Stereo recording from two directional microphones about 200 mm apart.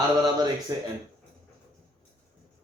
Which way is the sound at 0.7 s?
20° right (ahead or behind).